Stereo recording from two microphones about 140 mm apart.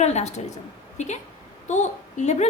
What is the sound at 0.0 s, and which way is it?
A woman's voice, 55° left (ahead or behind).